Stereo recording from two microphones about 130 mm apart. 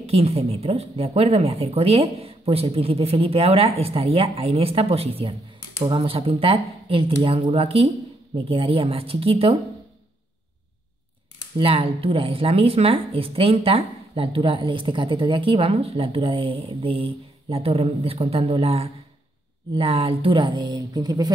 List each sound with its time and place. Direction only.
0.0 s speech: 50° right (ahead or behind)
11.5 s speech: 45° right (ahead or behind)